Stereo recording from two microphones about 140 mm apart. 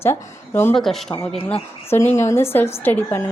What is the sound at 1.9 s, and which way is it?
A woman's voice, 20° left (ahead or behind).